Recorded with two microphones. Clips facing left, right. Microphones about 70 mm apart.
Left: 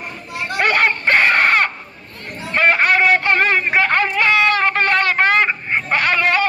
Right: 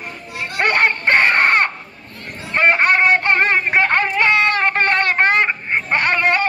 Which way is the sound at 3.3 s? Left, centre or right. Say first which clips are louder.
Even; right.